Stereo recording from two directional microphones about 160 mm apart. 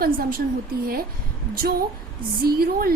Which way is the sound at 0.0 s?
65° right (ahead or behind).